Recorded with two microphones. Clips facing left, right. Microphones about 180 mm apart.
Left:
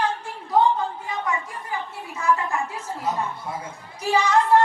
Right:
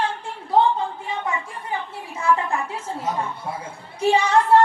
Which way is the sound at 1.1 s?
25° right (ahead or behind).